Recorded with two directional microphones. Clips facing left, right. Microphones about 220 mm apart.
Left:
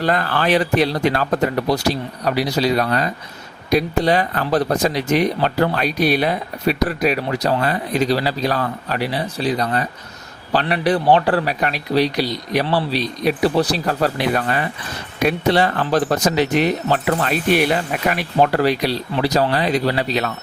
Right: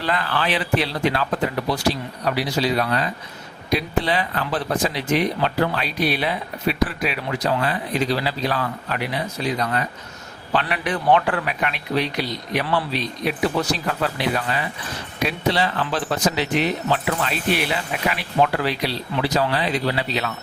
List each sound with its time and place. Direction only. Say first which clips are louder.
0.0 s speech: left 5 dB; 45° left (ahead or behind)